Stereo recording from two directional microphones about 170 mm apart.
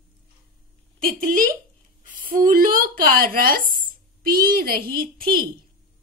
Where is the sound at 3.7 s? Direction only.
60° right (ahead or behind).